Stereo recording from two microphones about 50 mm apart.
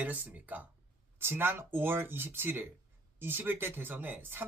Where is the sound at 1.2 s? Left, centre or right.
Right.